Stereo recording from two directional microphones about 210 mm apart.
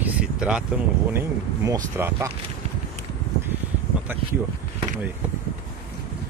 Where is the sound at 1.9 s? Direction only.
10° right (ahead or behind).